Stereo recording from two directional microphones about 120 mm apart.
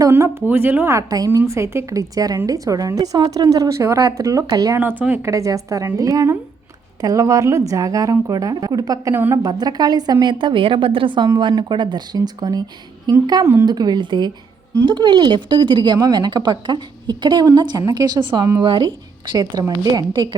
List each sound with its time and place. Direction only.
0.0 s a woman's voice: 20° right (ahead or behind)
4.8 s a woman's voice: 15° right (ahead or behind)
5.3 s a woman's voice: 30° right (ahead or behind)
9.1 s a woman's voice: 20° right (ahead or behind)
9.4 s a woman's voice: 35° right (ahead or behind)
18.6 s a woman's voice: 45° right (ahead or behind)